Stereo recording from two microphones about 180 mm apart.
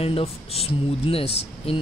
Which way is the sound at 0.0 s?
35° left (ahead or behind).